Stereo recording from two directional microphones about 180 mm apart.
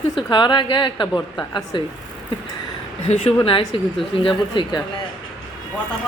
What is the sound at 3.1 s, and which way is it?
A woman's voice, 35° left (ahead or behind).